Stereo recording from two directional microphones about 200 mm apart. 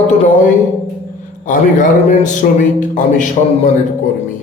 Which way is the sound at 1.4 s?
40° left (ahead or behind).